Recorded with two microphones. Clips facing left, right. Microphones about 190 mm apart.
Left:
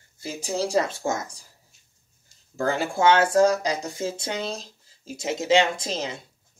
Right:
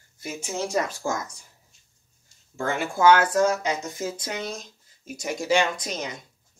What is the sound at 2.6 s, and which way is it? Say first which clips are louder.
Speech: left 1 dB; 30° left (ahead or behind).